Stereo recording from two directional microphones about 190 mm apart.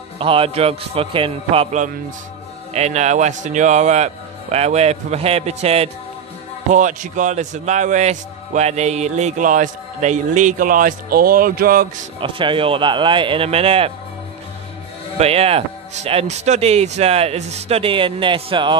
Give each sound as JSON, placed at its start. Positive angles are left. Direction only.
{"t": 0.2, "sound": "a man's voice", "side_deg": -30}
{"t": 12.2, "sound": "a man's voice", "side_deg": -25}
{"t": 15.1, "sound": "speech", "side_deg": -30}